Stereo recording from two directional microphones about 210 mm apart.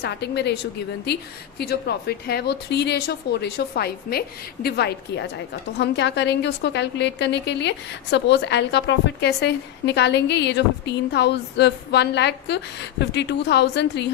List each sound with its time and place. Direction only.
0.0 s a woman's voice: 55° left (ahead or behind)